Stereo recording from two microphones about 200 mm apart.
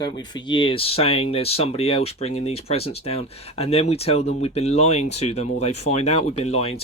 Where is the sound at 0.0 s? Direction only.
20° left (ahead or behind).